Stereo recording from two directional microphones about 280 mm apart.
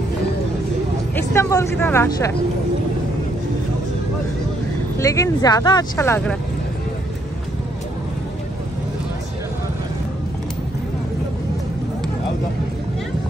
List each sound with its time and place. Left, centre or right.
1.1 s speech: centre
4.9 s speech: centre